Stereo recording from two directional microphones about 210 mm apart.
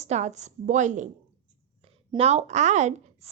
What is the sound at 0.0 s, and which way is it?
A woman's voice, 35° right (ahead or behind).